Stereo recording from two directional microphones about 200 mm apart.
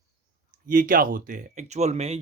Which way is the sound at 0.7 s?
45° right (ahead or behind).